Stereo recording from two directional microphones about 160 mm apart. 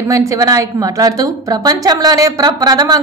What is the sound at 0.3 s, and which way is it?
A woman's voice, 20° right (ahead or behind).